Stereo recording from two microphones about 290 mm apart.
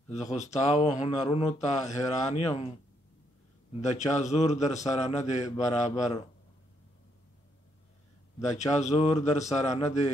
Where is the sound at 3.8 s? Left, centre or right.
Left.